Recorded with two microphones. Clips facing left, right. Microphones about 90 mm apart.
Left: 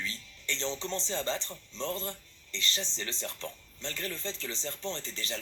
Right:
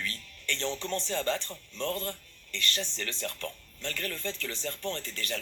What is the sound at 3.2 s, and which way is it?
Speech, 20° left (ahead or behind).